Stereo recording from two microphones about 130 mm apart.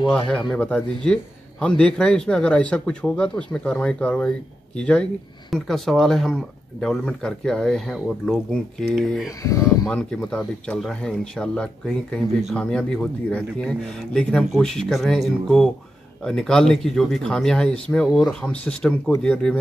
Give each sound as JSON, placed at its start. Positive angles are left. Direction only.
{"t": 0.5, "sound": "speech", "side_deg": 10}
{"t": 9.4, "sound": "speech", "side_deg": 25}
{"t": 9.8, "sound": "speech", "side_deg": 5}